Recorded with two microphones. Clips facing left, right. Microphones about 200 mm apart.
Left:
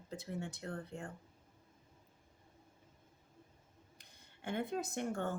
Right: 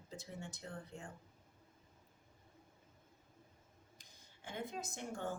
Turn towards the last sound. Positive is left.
turn(degrees=60)  # may be behind; listen again after turning